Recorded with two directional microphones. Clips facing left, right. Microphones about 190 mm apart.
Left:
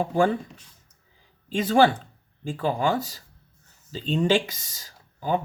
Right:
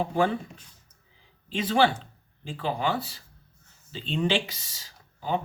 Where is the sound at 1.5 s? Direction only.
45° left (ahead or behind).